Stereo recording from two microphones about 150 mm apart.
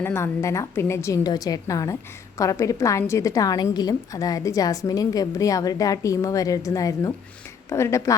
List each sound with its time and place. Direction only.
0.0 s a woman's voice: 15° left (ahead or behind)